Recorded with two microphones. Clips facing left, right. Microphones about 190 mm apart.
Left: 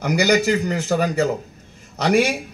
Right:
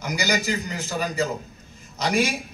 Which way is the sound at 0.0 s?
60° left (ahead or behind).